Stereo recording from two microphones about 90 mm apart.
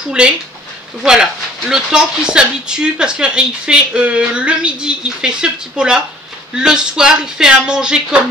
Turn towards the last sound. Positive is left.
turn(degrees=-10)  # may be behind; listen again after turning